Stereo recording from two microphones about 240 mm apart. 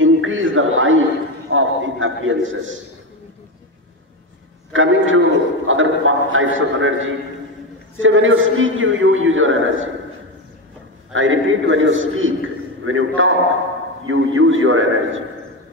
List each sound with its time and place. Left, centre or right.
0.0 s a sound: right
1.5 s a man's voice: right
4.7 s a man's voice: right
8.0 s a man's voice: right
11.1 s a man's voice: right